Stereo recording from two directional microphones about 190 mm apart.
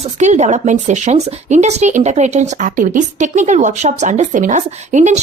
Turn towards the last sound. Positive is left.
turn(degrees=-40)  # may be behind; listen again after turning